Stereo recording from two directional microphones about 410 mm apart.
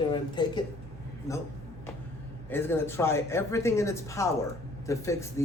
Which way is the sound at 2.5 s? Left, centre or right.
Centre.